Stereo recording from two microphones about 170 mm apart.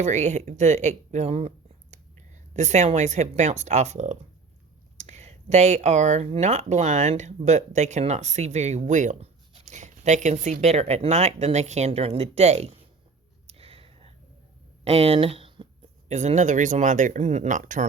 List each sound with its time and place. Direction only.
0.0 s speech: 45° right (ahead or behind)
13.5 s a sound: 35° right (ahead or behind)
14.8 s speech: 35° right (ahead or behind)
16.0 s speech: 40° right (ahead or behind)